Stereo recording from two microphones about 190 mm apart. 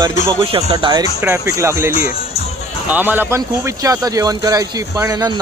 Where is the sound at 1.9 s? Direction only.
50° left (ahead or behind).